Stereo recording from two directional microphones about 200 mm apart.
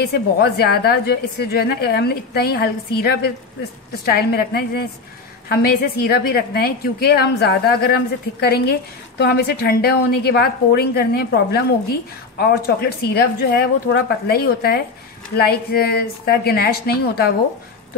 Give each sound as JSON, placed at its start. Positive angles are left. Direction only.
{"t": 0.0, "sound": "a woman's voice", "side_deg": 50}